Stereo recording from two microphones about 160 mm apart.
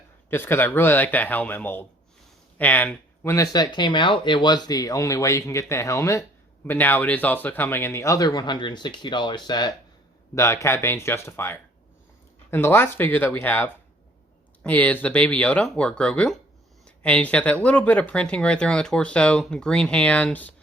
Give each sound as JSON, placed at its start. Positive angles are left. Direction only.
{"t": 0.3, "sound": "speech", "side_deg": 15}